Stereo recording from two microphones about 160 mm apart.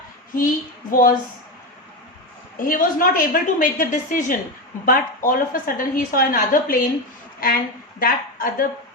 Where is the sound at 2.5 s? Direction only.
60° left (ahead or behind).